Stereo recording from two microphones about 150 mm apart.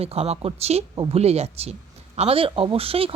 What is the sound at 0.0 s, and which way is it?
Speech, 45° right (ahead or behind).